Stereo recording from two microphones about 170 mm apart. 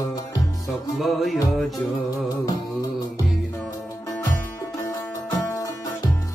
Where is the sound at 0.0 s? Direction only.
20° left (ahead or behind).